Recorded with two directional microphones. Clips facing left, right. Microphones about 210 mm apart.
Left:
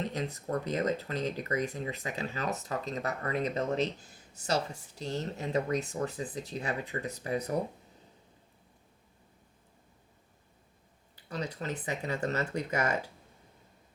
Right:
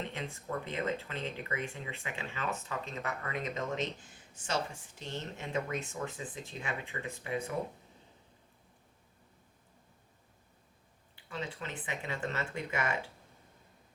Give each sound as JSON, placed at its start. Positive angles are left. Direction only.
{"t": 0.0, "sound": "speech", "side_deg": 40}
{"t": 11.1, "sound": "speech", "side_deg": 40}